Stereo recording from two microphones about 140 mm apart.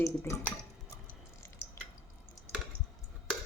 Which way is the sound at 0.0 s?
20° left (ahead or behind).